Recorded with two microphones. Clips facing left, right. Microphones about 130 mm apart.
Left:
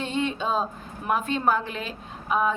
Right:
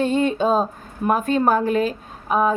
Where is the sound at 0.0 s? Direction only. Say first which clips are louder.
Right 8 dB; 45° right (ahead or behind).